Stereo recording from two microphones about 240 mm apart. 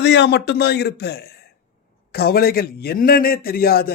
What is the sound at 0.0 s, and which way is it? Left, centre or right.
A man's voice, left.